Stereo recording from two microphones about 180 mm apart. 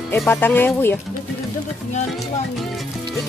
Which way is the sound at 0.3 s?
10° left (ahead or behind).